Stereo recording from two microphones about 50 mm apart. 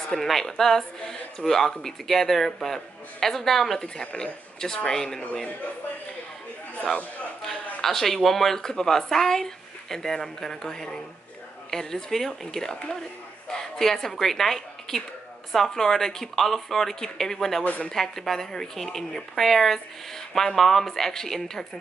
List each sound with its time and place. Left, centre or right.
0.1 s speech: centre
3.8 s speech: centre
7.8 s a woman's voice: centre
17.6 s speech: left
17.9 s speech: centre